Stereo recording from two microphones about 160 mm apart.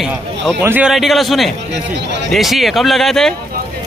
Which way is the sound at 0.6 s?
10° right (ahead or behind).